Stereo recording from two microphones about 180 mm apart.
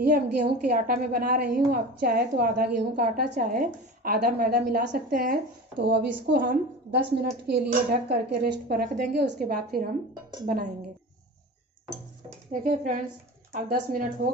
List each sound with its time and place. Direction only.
0.0 s a woman's voice: 60° right (ahead or behind)
12.6 s a woman's voice: 45° right (ahead or behind)